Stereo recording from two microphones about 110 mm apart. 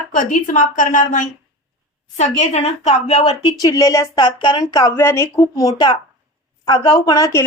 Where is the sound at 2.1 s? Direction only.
85° left.